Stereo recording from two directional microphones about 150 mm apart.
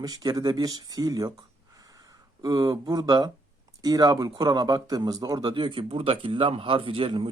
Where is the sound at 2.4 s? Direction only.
25° right (ahead or behind).